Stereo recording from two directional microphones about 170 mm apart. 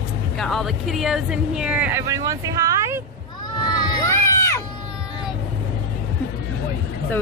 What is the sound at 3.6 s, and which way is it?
Crowd, 20° left (ahead or behind).